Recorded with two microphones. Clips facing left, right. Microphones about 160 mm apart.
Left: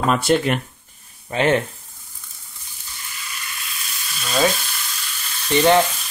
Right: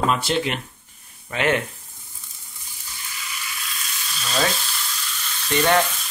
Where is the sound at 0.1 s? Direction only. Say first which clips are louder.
Left 5 dB; 50° left (ahead or behind).